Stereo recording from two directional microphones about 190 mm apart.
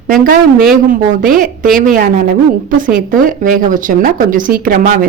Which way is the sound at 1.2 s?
50° right (ahead or behind).